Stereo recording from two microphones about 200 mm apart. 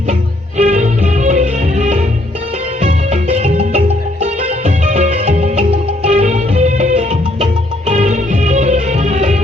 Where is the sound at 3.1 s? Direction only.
35° right (ahead or behind).